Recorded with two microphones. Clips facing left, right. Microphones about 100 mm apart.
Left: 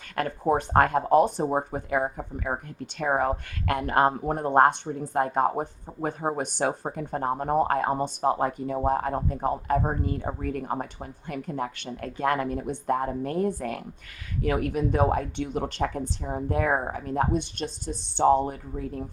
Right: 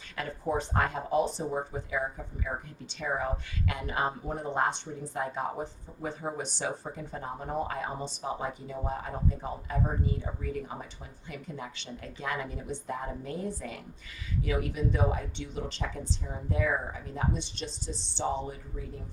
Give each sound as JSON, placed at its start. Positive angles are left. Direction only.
{"t": 0.2, "sound": "speech", "side_deg": 55}